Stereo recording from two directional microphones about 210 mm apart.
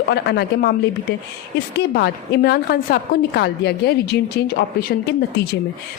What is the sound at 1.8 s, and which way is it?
A woman's voice, 50° left (ahead or behind).